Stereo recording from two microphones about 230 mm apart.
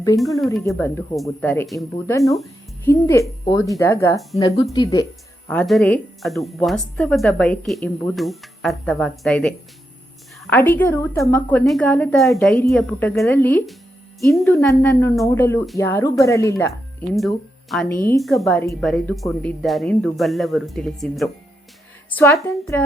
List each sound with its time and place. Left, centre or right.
0.7 s speech: centre
2.3 s music: centre
2.9 s speech: centre
5.5 s speech: centre
17.2 s speech: centre